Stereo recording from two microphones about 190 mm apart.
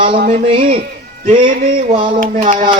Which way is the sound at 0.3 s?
30° right (ahead or behind).